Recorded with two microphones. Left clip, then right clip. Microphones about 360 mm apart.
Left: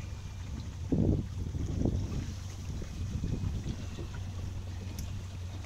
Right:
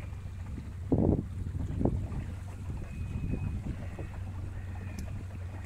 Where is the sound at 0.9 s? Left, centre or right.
Right.